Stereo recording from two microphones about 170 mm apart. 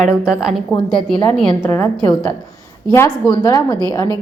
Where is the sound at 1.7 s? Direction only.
15° left (ahead or behind).